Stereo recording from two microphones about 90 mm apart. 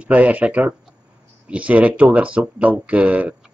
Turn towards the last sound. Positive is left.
turn(degrees=-15)  # may be behind; listen again after turning